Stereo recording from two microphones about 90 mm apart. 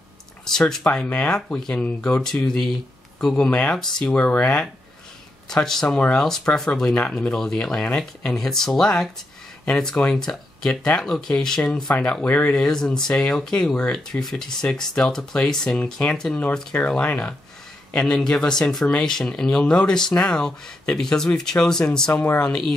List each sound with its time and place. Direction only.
0.5 s speech: 5° left (ahead or behind)
22.2 s speech: 20° left (ahead or behind)
22.5 s speech: 5° left (ahead or behind)